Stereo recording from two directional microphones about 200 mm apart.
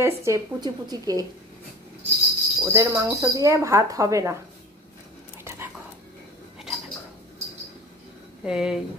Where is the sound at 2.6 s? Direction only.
15° right (ahead or behind).